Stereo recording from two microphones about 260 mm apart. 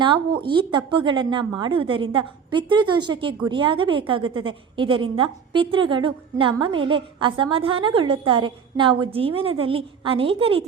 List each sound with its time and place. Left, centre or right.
0.4 s a woman's voice: centre